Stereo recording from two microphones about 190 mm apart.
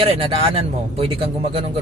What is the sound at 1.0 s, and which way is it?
Speech, 30° right (ahead or behind).